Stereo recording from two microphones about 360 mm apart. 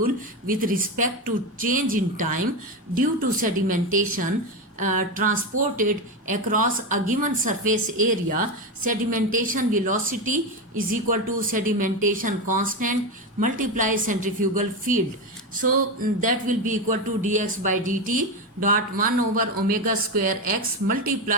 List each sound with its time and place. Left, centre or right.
0.0 s speech: right
3.4 s speech: right